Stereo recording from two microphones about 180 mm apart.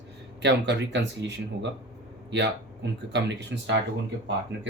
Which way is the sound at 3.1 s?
75° right (ahead or behind).